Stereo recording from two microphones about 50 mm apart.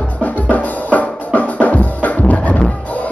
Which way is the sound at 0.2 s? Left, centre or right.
Left.